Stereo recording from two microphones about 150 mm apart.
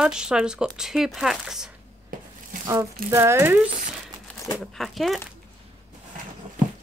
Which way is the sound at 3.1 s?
15° right (ahead or behind).